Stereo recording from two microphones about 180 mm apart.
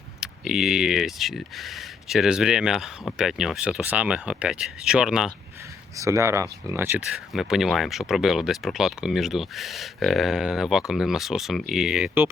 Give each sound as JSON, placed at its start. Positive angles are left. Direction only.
{"t": 0.2, "sound": "speech", "side_deg": -5}
{"t": 6.0, "sound": "speech", "side_deg": -15}
{"t": 7.3, "sound": "speech", "side_deg": 0}